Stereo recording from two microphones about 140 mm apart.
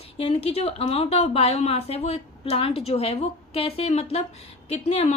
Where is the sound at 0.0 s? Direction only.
45° left (ahead or behind).